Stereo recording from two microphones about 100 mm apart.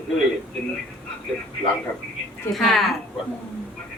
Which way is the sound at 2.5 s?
Centre (ahead or behind).